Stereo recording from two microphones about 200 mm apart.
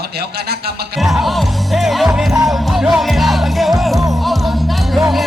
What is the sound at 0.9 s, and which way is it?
Music, centre (ahead or behind).